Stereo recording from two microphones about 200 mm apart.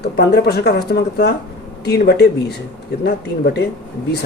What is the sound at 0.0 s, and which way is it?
A man's voice, 55° left (ahead or behind).